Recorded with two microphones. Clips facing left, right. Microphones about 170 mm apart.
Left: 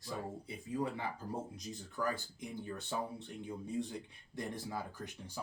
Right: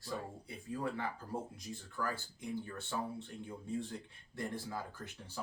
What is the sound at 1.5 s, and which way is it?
Speech, 20° left (ahead or behind).